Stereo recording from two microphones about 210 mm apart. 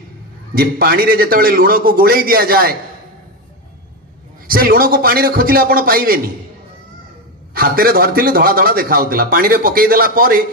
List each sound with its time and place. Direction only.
0.6 s speech: 45° right (ahead or behind)
4.5 s speech: 45° right (ahead or behind)
7.5 s speech: 45° right (ahead or behind)